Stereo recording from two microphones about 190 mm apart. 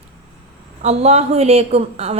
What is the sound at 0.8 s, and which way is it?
A woman's voice, 35° right (ahead or behind).